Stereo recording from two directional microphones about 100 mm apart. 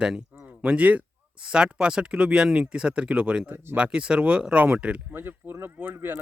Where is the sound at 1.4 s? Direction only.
10° right (ahead or behind).